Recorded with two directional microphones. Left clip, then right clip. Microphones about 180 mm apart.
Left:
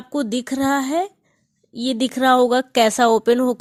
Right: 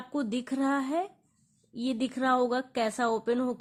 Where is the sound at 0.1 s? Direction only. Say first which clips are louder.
Left 10 dB; 30° left (ahead or behind).